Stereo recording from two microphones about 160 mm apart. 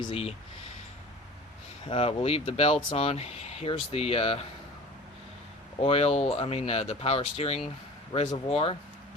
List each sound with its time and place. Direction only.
0.0 s speech: 35° left (ahead or behind)
1.9 s speech: 35° left (ahead or behind)
5.8 s speech: 40° left (ahead or behind)